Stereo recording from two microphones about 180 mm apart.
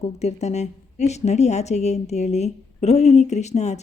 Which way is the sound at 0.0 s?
35° left (ahead or behind).